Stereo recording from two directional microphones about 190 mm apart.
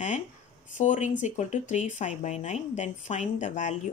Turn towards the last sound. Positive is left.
turn(degrees=40)  # may be behind; listen again after turning